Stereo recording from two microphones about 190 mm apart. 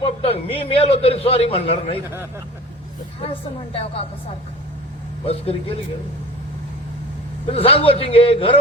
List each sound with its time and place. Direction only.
0.0 s a man's voice: 30° left (ahead or behind)
3.2 s a man's voice: 30° left (ahead or behind)
5.2 s a man's voice: 30° left (ahead or behind)
7.5 s a man's voice: 30° left (ahead or behind)